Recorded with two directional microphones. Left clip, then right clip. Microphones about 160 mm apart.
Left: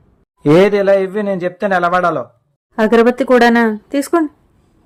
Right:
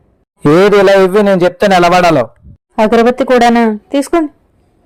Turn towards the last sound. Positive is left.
turn(degrees=-15)  # may be behind; listen again after turning